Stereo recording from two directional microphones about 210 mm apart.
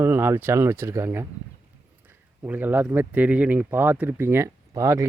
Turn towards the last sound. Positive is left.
turn(degrees=-15)  # may be behind; listen again after turning